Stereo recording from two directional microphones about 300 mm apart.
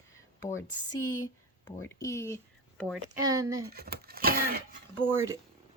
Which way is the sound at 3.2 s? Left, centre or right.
Centre.